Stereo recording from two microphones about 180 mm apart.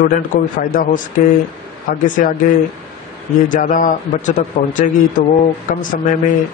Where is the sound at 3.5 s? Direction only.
45° left (ahead or behind).